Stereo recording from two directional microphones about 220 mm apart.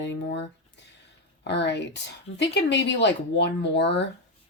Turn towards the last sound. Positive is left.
turn(degrees=50)  # may be behind; listen again after turning